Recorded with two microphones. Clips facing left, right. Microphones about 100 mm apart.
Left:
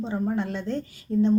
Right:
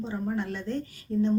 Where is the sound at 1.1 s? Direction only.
50° left (ahead or behind).